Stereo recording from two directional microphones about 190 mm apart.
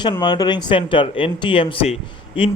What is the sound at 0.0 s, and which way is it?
Speech, 25° left (ahead or behind).